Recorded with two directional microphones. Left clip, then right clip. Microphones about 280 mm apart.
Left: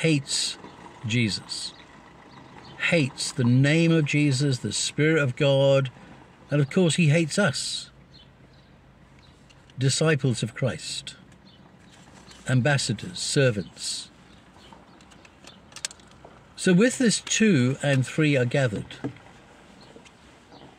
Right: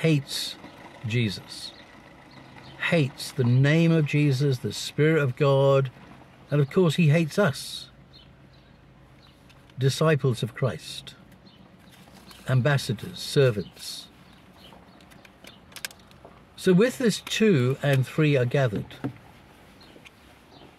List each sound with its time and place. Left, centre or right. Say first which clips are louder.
0.0 s speech: left 1 dB; centre
0.6 s a sound: left 1 dB; right
1.1 s speech: left 3 dB; centre
2.8 s speech: left 2 dB; centre
9.8 s speech: even; centre
12.4 s speech: left 2 dB; centre
16.6 s speech: even; centre